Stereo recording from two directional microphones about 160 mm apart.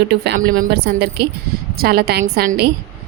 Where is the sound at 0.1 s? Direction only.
75° right (ahead or behind); by 1.3 s 90° right.